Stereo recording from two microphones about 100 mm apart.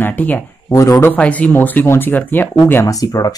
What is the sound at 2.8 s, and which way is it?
Speech, 35° left (ahead or behind).